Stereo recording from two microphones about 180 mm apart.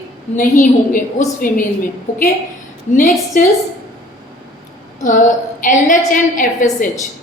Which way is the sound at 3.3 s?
45° left (ahead or behind).